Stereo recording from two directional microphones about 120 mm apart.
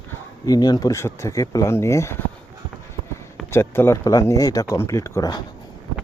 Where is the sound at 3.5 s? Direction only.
20° left (ahead or behind).